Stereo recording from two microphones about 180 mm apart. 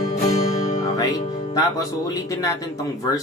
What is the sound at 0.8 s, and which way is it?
Music, 20° left (ahead or behind).